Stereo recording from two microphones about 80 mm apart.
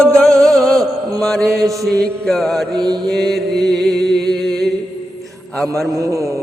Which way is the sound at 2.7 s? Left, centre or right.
Right.